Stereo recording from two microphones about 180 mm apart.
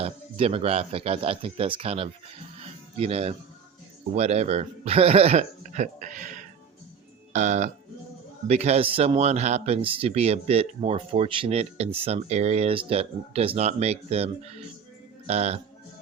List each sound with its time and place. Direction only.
0.0 s speech: 35° right (ahead or behind)
2.6 s music: 35° right (ahead or behind)
4.1 s speech: 40° right (ahead or behind)